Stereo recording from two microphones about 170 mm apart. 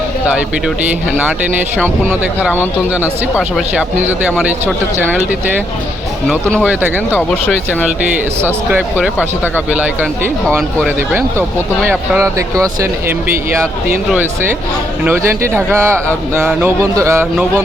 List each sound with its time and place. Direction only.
1.8 s speech: 10° right (ahead or behind)
6.7 s speech: 10° right (ahead or behind)
7.1 s speech: 10° left (ahead or behind)
8.4 s speech: 10° right (ahead or behind)
15.0 s speech: 15° right (ahead or behind)